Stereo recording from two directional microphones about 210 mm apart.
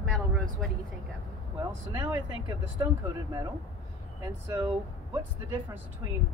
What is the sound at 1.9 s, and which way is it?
Speech, 15° right (ahead or behind).